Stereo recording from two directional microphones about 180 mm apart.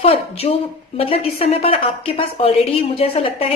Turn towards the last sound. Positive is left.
turn(degrees=35)  # may be behind; listen again after turning